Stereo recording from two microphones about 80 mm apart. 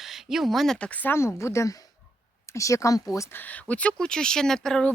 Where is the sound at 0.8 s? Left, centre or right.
Centre.